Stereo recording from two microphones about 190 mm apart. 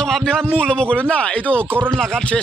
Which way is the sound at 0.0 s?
5° left (ahead or behind).